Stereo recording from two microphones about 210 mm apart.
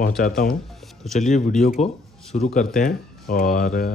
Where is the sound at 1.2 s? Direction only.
35° left (ahead or behind).